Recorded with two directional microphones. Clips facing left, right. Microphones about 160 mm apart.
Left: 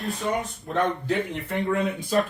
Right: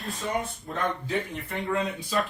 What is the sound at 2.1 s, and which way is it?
Speech, 50° left (ahead or behind).